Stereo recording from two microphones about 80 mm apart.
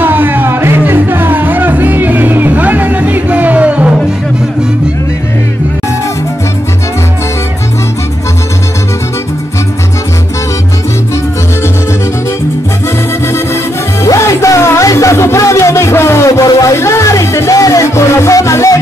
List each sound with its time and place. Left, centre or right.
0.0 s music: right
14.0 s music: left